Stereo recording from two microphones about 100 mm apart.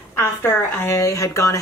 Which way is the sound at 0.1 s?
25° left (ahead or behind).